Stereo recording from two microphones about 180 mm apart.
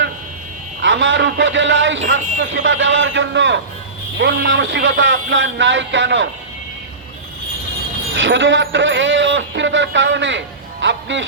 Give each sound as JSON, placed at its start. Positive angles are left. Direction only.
{"t": 0.8, "sound": "a man's voice", "side_deg": -90}
{"t": 4.2, "sound": "speech", "side_deg": -80}
{"t": 8.2, "sound": "a man's voice", "side_deg": -90}